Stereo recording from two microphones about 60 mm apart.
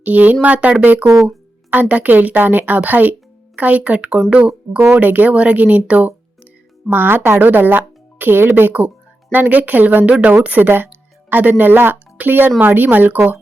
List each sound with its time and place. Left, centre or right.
0.0 s speech: right
1.0 s speech: right
1.7 s speech: right
4.9 s speech: right
6.9 s speech: right